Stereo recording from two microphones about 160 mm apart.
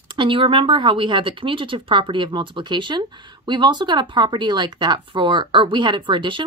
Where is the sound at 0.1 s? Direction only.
30° right (ahead or behind).